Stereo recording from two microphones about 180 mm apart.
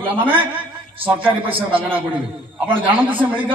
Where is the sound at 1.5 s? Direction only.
30° right (ahead or behind).